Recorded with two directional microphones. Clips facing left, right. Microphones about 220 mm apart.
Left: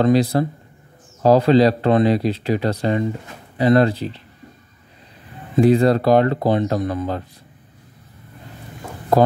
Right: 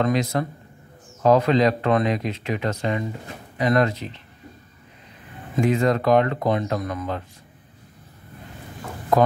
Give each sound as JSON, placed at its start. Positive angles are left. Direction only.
{"t": 0.0, "sound": "speech", "side_deg": 35}
{"t": 5.6, "sound": "speech", "side_deg": 35}
{"t": 9.1, "sound": "speech", "side_deg": 35}